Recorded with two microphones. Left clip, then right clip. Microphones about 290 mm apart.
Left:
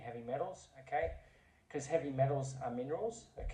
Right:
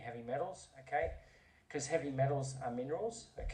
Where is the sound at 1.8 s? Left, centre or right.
Right.